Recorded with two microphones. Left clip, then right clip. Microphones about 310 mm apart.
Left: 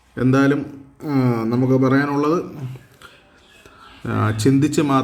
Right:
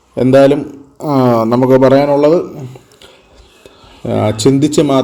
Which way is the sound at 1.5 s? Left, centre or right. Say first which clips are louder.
Right 9 dB; right.